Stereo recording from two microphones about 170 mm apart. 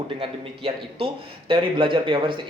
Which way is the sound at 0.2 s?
30° right (ahead or behind).